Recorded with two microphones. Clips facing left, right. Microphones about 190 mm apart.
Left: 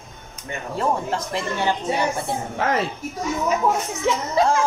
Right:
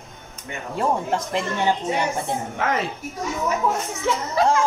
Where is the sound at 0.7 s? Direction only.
15° right (ahead or behind).